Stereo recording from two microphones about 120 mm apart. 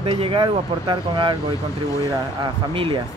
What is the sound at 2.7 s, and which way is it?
Speech, 50° right (ahead or behind).